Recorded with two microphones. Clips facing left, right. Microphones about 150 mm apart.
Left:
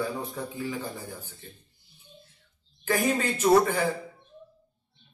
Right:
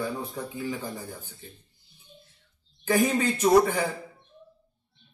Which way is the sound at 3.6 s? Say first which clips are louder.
Even; 15° right (ahead or behind).